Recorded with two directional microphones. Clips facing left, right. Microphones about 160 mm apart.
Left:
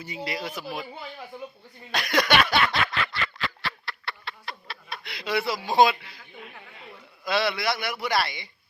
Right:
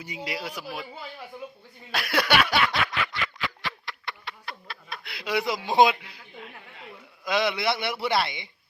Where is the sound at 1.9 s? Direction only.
5° right (ahead or behind).